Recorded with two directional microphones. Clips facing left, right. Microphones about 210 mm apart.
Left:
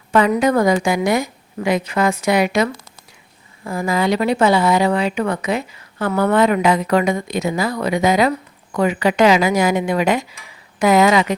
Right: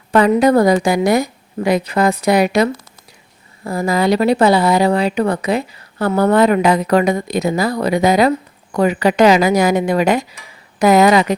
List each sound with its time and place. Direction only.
0.1 s speech: 35° right (ahead or behind)